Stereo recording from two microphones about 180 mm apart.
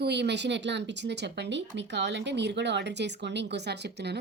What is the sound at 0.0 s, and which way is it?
A woman's voice, 70° right (ahead or behind).